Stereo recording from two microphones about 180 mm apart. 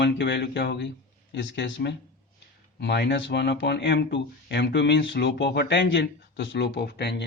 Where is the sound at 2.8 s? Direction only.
70° left (ahead or behind).